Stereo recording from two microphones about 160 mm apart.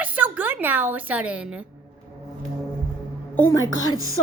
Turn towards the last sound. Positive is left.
turn(degrees=20)  # may be behind; listen again after turning